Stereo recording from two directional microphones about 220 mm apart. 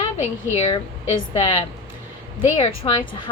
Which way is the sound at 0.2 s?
30° left (ahead or behind).